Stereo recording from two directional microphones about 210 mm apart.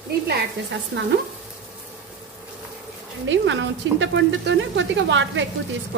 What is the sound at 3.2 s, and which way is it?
Speech, 60° right (ahead or behind).